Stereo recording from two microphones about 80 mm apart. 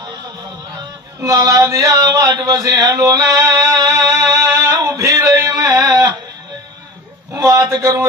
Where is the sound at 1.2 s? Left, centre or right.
Right.